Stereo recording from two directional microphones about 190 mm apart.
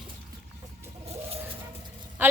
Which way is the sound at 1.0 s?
35° right (ahead or behind).